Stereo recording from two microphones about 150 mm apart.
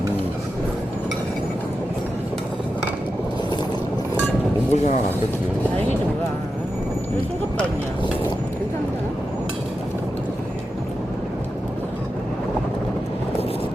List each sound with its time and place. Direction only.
4.7 s speech: 45° left (ahead or behind)